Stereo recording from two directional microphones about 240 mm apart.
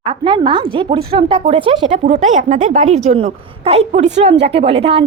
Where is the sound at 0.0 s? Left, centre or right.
Right.